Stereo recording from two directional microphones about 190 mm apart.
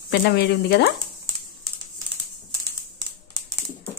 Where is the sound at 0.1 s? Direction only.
60° left (ahead or behind).